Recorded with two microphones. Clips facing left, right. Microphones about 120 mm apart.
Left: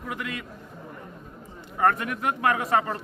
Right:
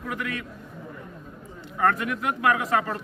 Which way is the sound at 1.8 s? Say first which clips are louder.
Even; 25° left (ahead or behind).